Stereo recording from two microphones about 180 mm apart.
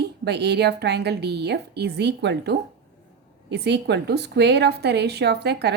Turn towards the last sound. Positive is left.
turn(degrees=-65)  # may be behind; listen again after turning